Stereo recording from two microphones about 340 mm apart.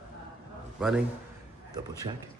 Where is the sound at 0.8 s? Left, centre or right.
Centre.